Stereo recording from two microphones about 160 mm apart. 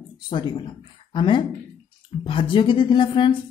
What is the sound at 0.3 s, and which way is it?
A woman's voice, 30° left (ahead or behind).